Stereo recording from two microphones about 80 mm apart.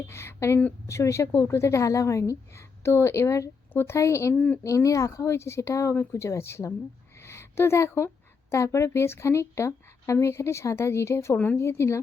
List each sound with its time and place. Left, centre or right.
0.1 s a woman's voice: left
4.4 s speech: centre
4.6 s a woman's voice: left